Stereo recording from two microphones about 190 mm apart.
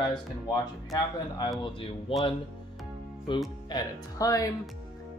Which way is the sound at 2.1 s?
30° left (ahead or behind).